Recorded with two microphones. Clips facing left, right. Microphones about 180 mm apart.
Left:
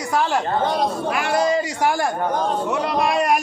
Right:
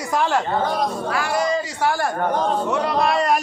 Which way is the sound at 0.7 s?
20° left (ahead or behind).